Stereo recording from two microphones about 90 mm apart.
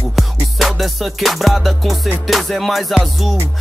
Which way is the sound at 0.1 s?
Centre (ahead or behind).